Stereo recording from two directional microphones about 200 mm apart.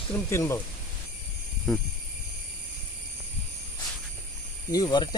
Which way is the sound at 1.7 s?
Centre (ahead or behind).